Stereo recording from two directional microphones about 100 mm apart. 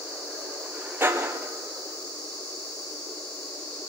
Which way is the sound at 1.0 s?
20° right (ahead or behind).